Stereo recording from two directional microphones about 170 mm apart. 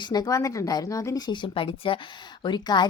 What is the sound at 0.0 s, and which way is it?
A woman's voice, 25° left (ahead or behind).